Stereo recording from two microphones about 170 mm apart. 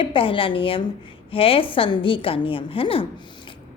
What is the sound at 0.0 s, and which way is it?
A woman's voice, 30° left (ahead or behind).